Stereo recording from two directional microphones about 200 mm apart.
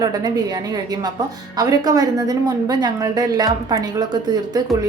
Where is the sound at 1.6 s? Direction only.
20° right (ahead or behind).